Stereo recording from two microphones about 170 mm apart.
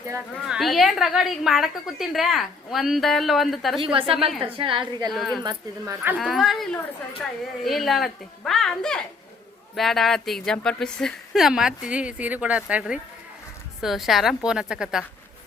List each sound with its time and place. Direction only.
0.4 s a woman's voice: centre (ahead or behind)
3.8 s a woman's voice: 30° right (ahead or behind)
5.1 s a woman's voice: centre (ahead or behind)
5.4 s speech: 20° right (ahead or behind)
6.1 s a woman's voice: centre (ahead or behind)